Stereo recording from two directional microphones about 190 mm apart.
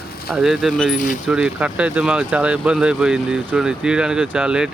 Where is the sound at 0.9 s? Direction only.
40° left (ahead or behind).